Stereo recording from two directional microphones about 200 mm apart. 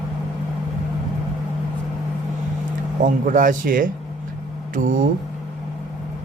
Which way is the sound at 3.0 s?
40° right (ahead or behind).